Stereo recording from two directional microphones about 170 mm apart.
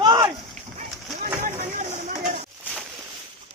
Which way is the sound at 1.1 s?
45° right (ahead or behind).